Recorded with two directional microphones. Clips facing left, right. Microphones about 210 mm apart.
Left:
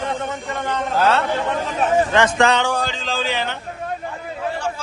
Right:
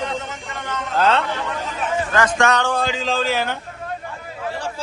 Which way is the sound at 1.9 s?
30° left (ahead or behind).